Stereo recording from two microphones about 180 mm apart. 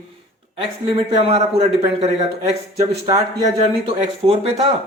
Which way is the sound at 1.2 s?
35° right (ahead or behind).